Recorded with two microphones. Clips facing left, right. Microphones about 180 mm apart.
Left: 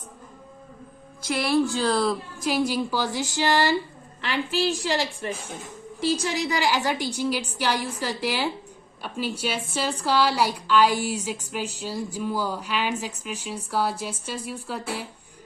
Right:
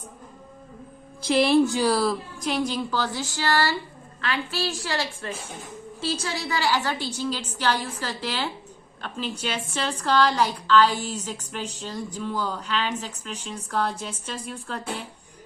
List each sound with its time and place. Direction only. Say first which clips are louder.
1.4 s a woman's voice: right 3 dB; 25° right (ahead or behind); by 2.1 s 10° right (ahead or behind)
2.4 s a woman's voice: left 3 dB; 5° left (ahead or behind)